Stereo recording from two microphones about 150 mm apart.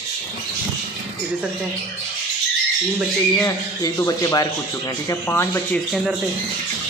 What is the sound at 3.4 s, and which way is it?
Speech, 25° left (ahead or behind).